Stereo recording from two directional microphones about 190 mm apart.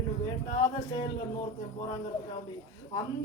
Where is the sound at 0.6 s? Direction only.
20° left (ahead or behind).